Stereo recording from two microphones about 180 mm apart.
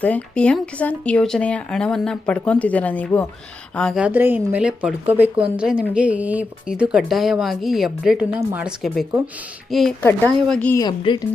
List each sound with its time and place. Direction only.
0.0 s speech: 5° left (ahead or behind)
4.0 s a woman's voice: 10° right (ahead or behind); by 10.8 s 5° left (ahead or behind)
10.8 s a woman's voice: 25° left (ahead or behind)